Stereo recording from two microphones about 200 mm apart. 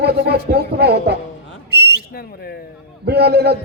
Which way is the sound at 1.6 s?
55° right (ahead or behind).